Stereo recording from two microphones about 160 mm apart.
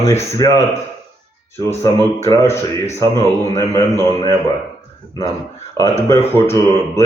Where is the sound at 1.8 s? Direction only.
15° left (ahead or behind).